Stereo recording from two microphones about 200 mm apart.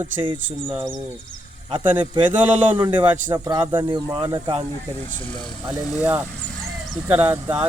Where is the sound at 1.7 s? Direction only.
25° right (ahead or behind).